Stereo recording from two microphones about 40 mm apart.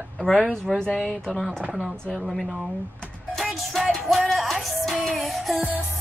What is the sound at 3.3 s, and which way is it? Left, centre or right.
Music, centre.